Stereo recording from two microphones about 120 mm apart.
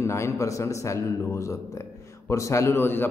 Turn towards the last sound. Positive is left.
turn(degrees=20)  # may be behind; listen again after turning